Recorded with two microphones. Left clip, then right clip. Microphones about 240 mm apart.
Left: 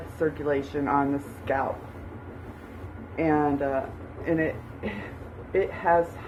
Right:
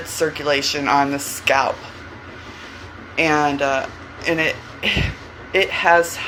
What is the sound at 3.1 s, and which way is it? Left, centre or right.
Speech, right.